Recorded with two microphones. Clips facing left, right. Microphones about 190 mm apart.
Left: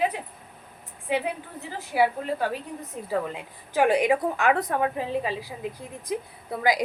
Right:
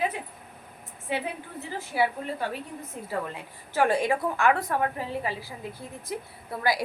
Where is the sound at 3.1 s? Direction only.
15° left (ahead or behind).